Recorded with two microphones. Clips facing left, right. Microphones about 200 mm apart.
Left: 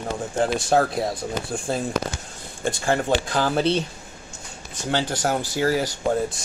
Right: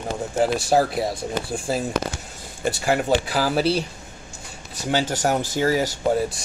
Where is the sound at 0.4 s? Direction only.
5° right (ahead or behind).